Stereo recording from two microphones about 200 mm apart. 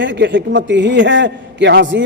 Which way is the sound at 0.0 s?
65° right (ahead or behind).